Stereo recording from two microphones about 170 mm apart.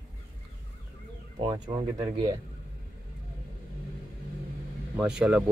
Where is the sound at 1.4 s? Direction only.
30° right (ahead or behind).